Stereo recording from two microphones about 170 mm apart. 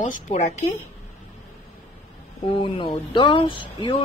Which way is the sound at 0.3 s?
40° left (ahead or behind).